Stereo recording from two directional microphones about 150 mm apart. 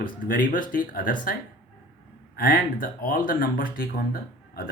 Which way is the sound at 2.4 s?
75° left (ahead or behind).